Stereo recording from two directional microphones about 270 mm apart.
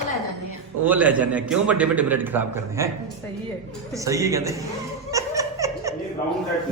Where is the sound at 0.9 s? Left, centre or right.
Centre.